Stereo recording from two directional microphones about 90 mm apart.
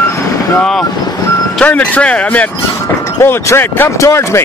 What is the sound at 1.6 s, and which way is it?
Speech, 15° left (ahead or behind).